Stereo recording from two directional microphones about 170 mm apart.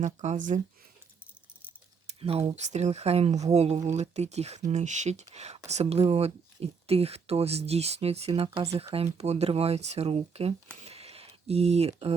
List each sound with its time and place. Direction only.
0.0 s speech: 45° right (ahead or behind)
2.6 s speech: 40° right (ahead or behind)
10.8 s a sound: 35° right (ahead or behind)